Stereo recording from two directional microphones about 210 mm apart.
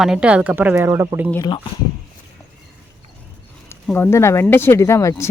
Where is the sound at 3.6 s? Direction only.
10° left (ahead or behind).